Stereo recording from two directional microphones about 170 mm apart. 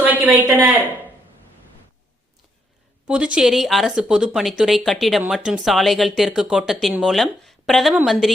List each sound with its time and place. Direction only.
0.0 s speech: 10° right (ahead or behind)
3.1 s speech: 5° right (ahead or behind)